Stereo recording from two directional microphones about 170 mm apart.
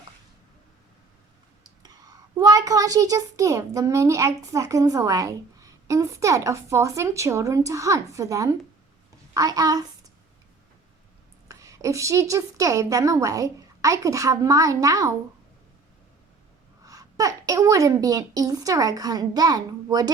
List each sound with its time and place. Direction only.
2.3 s a child's voice: 20° right (ahead or behind)
11.4 s a child's voice: 20° right (ahead or behind)
16.8 s a child's voice: 20° right (ahead or behind)